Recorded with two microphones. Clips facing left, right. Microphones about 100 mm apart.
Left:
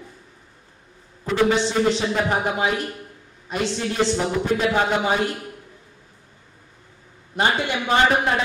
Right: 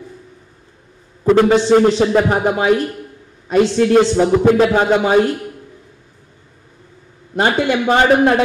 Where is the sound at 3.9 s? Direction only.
85° right.